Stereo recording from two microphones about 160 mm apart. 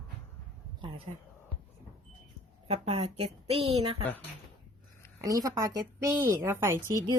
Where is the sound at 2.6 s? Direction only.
40° right (ahead or behind).